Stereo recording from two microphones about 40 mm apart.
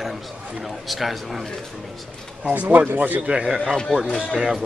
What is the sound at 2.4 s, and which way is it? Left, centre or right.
Speech, right.